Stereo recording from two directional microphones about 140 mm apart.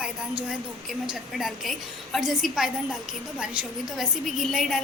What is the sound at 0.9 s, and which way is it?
A child's voice, centre (ahead or behind).